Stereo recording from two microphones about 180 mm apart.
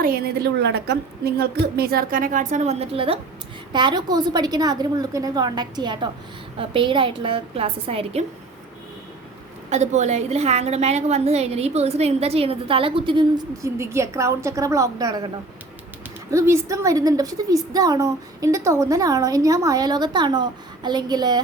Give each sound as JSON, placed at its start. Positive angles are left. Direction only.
{"t": 0.0, "sound": "a woman's voice", "side_deg": -55}
{"t": 9.6, "sound": "a woman's voice", "side_deg": -40}
{"t": 16.3, "sound": "a woman's voice", "side_deg": -15}